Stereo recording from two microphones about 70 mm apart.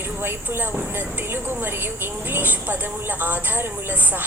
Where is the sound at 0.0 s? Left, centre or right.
Right.